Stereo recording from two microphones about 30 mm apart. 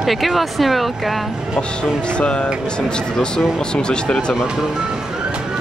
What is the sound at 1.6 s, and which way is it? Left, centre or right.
Music, left.